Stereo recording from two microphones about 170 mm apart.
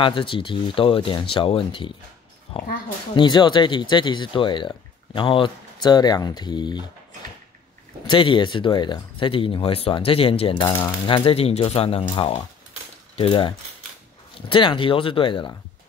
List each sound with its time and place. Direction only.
0.0 s speech: 30° left (ahead or behind)
8.1 s speech: 30° left (ahead or behind)
13.1 s mechanisms: 30° left (ahead or behind)
14.5 s speech: 30° left (ahead or behind)